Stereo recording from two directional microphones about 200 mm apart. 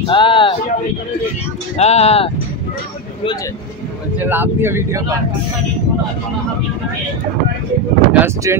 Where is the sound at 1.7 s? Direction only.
30° left (ahead or behind).